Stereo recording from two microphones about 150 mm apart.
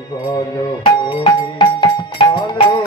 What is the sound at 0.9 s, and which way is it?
Music, 35° left (ahead or behind).